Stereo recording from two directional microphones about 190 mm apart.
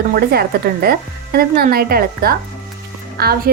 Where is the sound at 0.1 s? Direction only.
55° right (ahead or behind).